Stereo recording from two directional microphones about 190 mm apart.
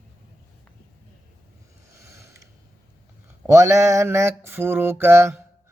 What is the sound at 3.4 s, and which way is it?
A man's voice, 15° right (ahead or behind).